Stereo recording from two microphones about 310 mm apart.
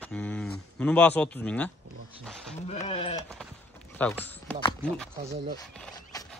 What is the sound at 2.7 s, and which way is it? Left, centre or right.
Speech, centre.